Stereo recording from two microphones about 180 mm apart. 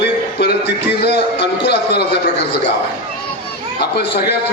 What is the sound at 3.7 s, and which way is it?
Speech, 65° left (ahead or behind).